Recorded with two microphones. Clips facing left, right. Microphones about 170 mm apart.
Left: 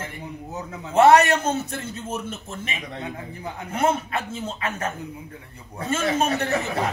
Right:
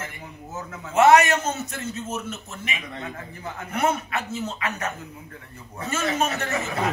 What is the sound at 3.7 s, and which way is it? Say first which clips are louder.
A man's voice: left 2 dB; 30° left (ahead or behind).